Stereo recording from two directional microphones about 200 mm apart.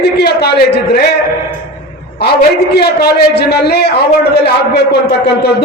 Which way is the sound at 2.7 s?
55° left (ahead or behind).